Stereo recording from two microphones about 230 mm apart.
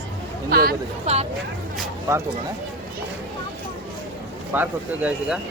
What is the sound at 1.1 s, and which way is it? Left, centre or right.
Speech, right.